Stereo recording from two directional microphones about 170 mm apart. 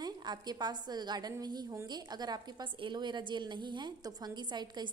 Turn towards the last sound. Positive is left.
turn(degrees=-25)  # may be behind; listen again after turning